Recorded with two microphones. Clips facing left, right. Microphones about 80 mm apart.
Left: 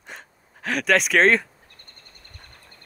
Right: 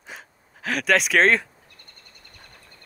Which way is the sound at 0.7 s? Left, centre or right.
Centre.